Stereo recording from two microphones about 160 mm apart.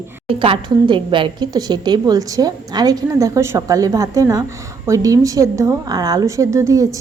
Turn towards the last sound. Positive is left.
turn(degrees=-20)  # may be behind; listen again after turning